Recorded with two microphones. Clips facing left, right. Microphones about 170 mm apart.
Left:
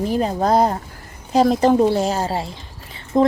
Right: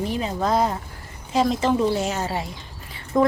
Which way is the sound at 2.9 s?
25° left (ahead or behind).